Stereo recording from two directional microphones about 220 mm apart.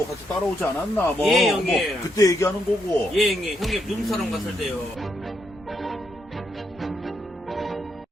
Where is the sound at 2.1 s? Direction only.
15° left (ahead or behind).